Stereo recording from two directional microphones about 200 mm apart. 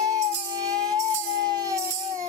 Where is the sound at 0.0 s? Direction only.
15° right (ahead or behind).